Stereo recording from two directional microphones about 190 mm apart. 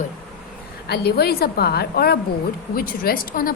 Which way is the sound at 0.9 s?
55° left (ahead or behind).